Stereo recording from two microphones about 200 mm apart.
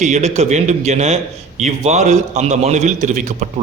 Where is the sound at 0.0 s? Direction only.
35° right (ahead or behind).